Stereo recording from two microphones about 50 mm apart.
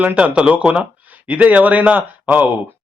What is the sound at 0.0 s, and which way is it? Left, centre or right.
Speech, right.